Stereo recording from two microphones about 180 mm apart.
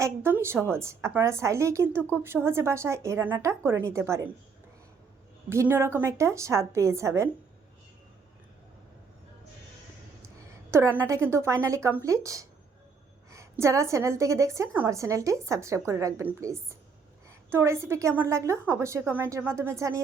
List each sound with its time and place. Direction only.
0.0 s a woman's voice: 15° right (ahead or behind)
5.5 s a woman's voice: 15° right (ahead or behind)
10.2 s a woman's voice: 15° right (ahead or behind)